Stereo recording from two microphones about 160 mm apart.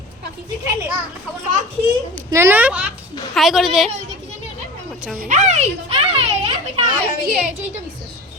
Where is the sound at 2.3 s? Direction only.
15° right (ahead or behind); by 3.9 s centre (ahead or behind).